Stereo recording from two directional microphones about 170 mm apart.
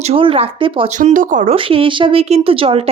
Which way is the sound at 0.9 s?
50° right (ahead or behind).